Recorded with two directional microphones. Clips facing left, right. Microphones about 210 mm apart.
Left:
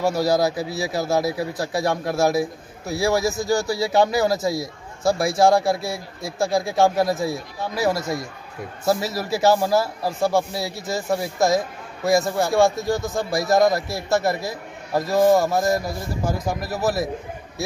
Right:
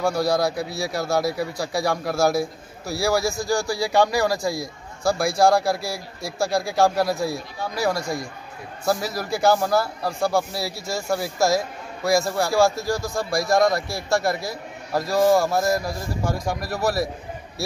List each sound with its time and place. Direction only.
0.0 s a man's voice: 5° left (ahead or behind)
3.5 s speech: 20° left (ahead or behind)
3.9 s a man's voice: 5° left (ahead or behind)
4.4 s speech: 25° left (ahead or behind)
5.0 s a man's voice: centre (ahead or behind)
8.8 s a man's voice: 5° left (ahead or behind)